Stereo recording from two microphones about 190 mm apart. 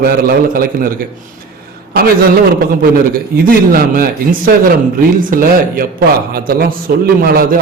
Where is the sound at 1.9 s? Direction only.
50° right (ahead or behind).